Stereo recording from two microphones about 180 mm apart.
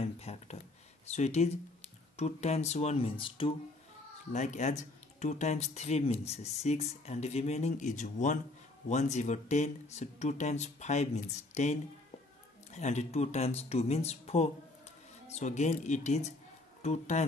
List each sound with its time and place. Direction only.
0.2 s a sound: 35° left (ahead or behind)
1.0 s speech: 35° left (ahead or behind)
4.3 s speech: 40° left (ahead or behind)